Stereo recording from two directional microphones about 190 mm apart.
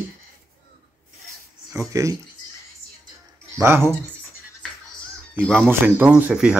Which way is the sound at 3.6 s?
15° right (ahead or behind).